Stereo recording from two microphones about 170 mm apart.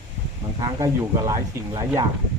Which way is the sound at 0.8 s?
20° right (ahead or behind).